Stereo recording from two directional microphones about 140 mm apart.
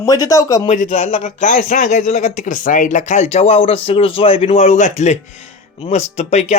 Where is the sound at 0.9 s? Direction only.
50° left (ahead or behind).